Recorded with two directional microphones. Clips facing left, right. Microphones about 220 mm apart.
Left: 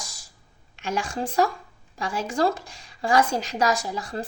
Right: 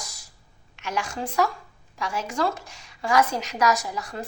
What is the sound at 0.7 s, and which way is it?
A woman's voice, 30° left (ahead or behind).